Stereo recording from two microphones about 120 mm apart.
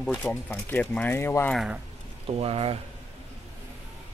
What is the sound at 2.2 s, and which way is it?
Speech, 55° right (ahead or behind).